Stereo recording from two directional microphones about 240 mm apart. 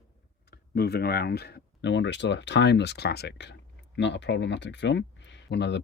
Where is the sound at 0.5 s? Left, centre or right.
Left.